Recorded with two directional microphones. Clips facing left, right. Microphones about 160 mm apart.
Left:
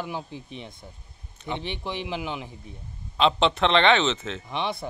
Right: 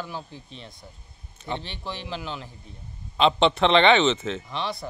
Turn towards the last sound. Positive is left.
turn(degrees=20)  # may be behind; listen again after turning